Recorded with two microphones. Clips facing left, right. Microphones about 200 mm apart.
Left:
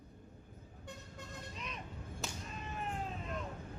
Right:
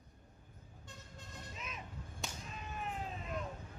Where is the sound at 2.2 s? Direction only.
Centre (ahead or behind).